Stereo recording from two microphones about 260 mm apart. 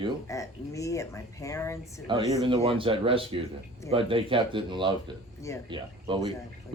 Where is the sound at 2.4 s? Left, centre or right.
Right.